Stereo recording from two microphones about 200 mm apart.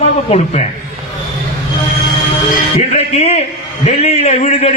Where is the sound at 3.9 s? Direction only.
30° left (ahead or behind).